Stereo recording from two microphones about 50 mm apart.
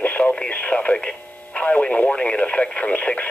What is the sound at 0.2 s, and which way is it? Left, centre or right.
Speech, left.